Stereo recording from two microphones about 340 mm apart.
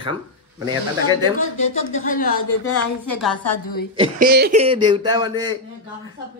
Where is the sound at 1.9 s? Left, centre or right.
Left.